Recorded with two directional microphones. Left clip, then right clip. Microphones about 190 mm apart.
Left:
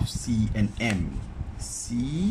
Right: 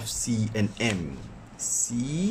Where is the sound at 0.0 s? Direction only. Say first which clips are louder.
Even; 30° right (ahead or behind).